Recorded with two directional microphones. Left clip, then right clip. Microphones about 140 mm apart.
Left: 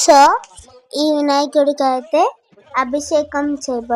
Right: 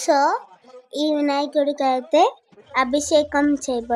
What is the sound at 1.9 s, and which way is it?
A woman's voice, 5° right (ahead or behind).